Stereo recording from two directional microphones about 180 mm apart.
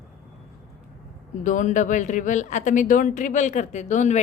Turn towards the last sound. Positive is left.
turn(degrees=40)  # may be behind; listen again after turning